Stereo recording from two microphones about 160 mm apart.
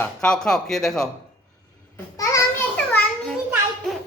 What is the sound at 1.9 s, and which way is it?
Babbling, 20° left (ahead or behind).